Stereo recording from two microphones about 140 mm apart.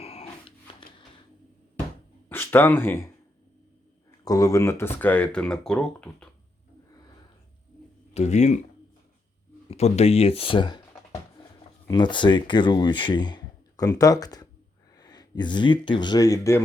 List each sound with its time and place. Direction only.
0.0 s a sound: 45° left (ahead or behind)
2.3 s speech: 15° left (ahead or behind)
4.2 s speech: 25° left (ahead or behind); by 6.2 s 5° left (ahead or behind)
8.1 s speech: 55° left (ahead or behind)
9.6 s speech: 50° left (ahead or behind)
11.9 s speech: 35° left (ahead or behind)